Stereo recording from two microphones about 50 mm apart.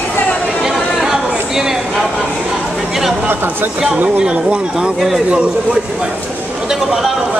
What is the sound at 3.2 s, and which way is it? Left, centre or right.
Speech, right.